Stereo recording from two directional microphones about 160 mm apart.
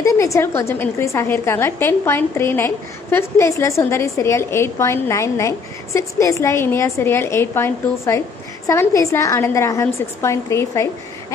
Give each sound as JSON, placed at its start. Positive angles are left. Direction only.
{"t": 0.0, "sound": "a woman's voice", "side_deg": 20}